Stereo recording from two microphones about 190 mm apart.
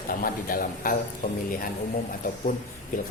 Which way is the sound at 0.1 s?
50° left (ahead or behind).